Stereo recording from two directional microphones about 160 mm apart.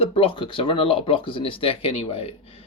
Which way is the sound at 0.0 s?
35° left (ahead or behind).